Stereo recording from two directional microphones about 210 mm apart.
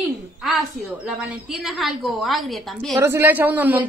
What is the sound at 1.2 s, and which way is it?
A woman's voice, centre (ahead or behind).